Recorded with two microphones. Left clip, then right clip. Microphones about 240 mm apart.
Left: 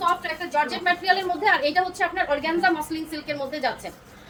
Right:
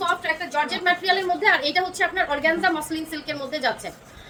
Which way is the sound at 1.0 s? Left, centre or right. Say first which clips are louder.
Even; centre.